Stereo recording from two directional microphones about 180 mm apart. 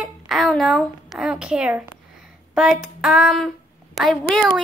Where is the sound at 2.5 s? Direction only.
Centre (ahead or behind).